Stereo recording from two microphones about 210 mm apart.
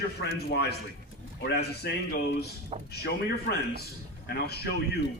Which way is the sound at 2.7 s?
30° right (ahead or behind).